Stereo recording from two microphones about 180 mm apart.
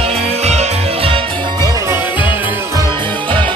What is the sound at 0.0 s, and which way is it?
Music, 35° right (ahead or behind).